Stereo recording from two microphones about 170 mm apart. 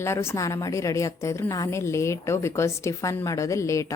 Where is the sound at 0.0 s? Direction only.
15° left (ahead or behind).